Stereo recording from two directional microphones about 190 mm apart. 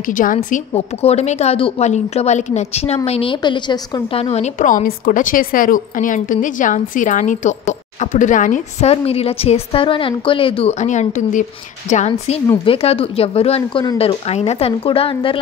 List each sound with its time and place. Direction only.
0.0 s a woman's voice: 45° left (ahead or behind)
0.5 s a woman's voice: 35° left (ahead or behind)
12.4 s a woman's voice: 30° left (ahead or behind)